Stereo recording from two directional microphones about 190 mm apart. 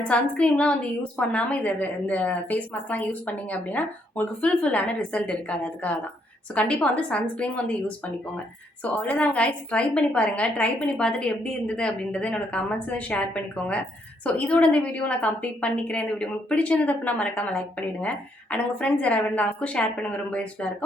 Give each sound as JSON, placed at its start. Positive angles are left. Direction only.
{"t": 0.1, "sound": "a woman's voice", "side_deg": 5}